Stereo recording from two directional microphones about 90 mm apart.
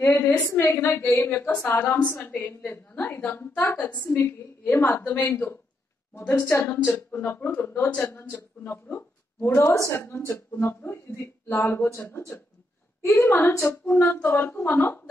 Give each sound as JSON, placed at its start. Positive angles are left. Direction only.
{"t": 0.0, "sound": "a woman's voice", "side_deg": 30}
{"t": 13.3, "sound": "speech", "side_deg": 20}